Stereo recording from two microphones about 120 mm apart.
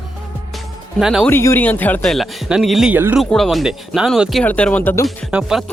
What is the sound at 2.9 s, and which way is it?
Speech, 15° right (ahead or behind).